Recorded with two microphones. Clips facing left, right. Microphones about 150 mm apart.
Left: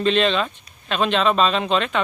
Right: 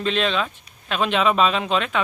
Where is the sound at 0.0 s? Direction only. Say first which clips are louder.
Left 3 dB; 5° right (ahead or behind).